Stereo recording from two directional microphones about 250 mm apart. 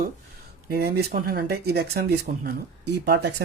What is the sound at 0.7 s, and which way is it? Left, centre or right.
Speech, right.